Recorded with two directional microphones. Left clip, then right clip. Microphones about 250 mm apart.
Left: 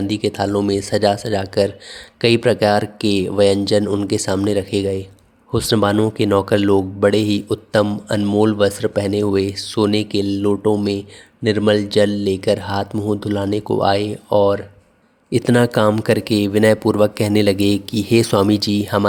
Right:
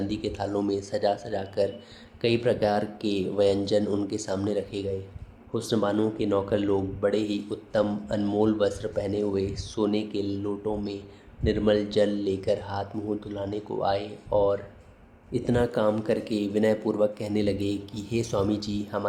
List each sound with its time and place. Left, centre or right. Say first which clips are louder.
0.1 s speech: left 10 dB; left